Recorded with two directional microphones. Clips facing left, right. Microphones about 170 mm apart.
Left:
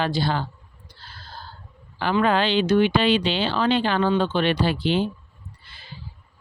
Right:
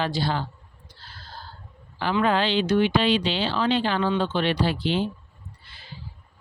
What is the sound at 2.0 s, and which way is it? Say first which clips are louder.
Speech: left 2 dB; 60° left (ahead or behind).